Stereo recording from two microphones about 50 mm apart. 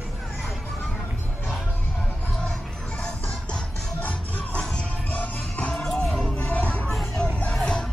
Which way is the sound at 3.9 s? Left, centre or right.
Left.